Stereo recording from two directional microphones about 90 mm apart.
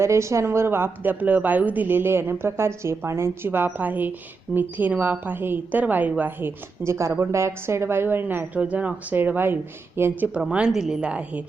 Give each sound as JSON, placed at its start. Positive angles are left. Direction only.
{"t": 0.0, "sound": "a woman's voice", "side_deg": -35}
{"t": 6.8, "sound": "a woman's voice", "side_deg": -35}
{"t": 10.3, "sound": "a woman's voice", "side_deg": -10}